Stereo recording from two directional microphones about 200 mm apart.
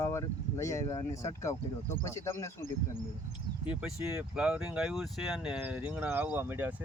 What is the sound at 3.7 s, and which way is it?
Speech, 5° right (ahead or behind).